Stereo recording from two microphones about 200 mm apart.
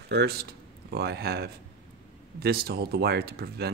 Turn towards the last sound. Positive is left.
turn(degrees=-50)  # may be behind; listen again after turning